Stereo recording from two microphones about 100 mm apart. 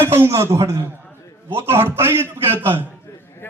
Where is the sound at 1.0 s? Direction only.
25° left (ahead or behind).